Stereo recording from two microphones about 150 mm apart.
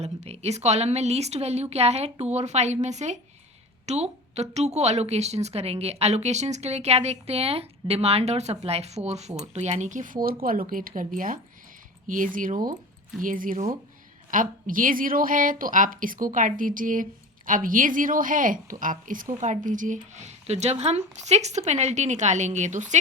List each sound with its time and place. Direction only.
0.0 s a woman's voice: 45° right (ahead or behind)